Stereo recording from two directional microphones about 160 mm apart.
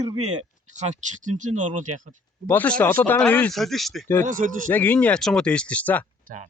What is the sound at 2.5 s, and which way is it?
Speech, 10° left (ahead or behind).